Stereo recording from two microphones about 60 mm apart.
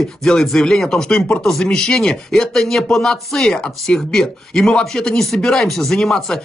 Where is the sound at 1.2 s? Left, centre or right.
Left.